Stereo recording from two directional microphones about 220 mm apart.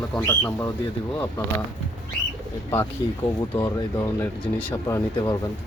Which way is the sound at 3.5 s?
15° left (ahead or behind).